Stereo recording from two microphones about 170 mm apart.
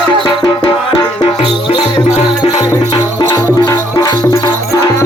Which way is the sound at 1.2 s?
30° left (ahead or behind).